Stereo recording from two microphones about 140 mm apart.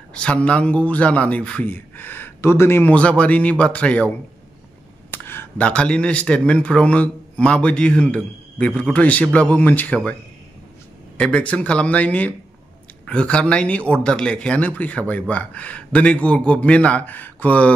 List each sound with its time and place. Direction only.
0.1 s speech: 10° left (ahead or behind)
5.1 s speech: 15° left (ahead or behind)
11.1 s speech: 5° left (ahead or behind)